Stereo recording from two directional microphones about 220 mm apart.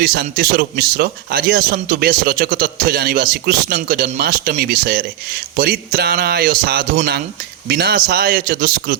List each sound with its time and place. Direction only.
0.0 s speech: 45° right (ahead or behind)